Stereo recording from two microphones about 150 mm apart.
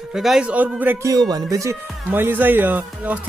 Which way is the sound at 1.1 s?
25° right (ahead or behind).